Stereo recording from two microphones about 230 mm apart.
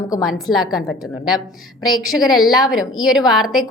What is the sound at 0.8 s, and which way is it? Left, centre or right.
A woman's voice, centre.